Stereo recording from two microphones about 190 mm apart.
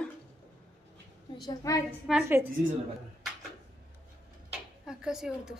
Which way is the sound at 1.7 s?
15° left (ahead or behind).